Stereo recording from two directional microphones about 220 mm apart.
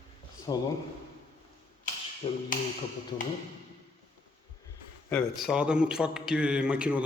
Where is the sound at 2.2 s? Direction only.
25° left (ahead or behind).